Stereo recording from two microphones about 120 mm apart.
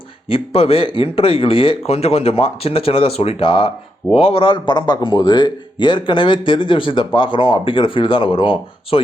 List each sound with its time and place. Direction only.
0.3 s speech: 55° left (ahead or behind)